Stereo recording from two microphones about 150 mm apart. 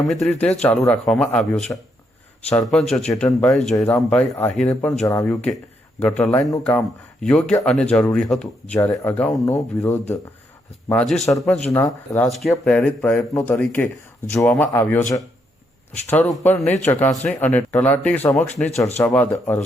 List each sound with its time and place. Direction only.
0.0 s speech: 5° left (ahead or behind)
11.3 s speech: 5° left (ahead or behind)
11.7 s speech: 20° left (ahead or behind)
12.3 s speech: centre (ahead or behind)